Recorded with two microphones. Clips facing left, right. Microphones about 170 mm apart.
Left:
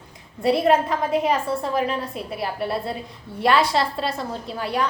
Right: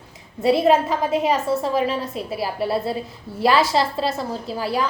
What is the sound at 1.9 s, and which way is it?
Speech, 30° right (ahead or behind).